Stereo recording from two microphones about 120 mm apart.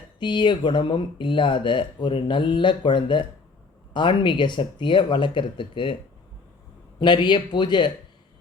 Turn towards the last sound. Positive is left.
turn(degrees=40)  # may be behind; listen again after turning